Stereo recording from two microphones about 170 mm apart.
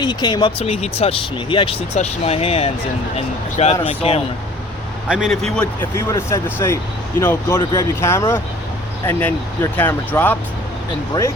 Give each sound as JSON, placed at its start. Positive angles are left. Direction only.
{"t": 0.0, "sound": "speech", "side_deg": 25}
{"t": 5.0, "sound": "a man's voice", "side_deg": -5}
{"t": 5.8, "sound": "speech", "side_deg": 15}
{"t": 9.7, "sound": "speech", "side_deg": 10}